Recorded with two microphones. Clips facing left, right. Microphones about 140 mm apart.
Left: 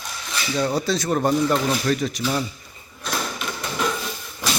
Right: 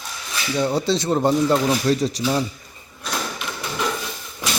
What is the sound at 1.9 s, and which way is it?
Speech, 35° right (ahead or behind).